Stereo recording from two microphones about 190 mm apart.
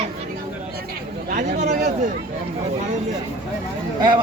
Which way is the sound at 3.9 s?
25° right (ahead or behind).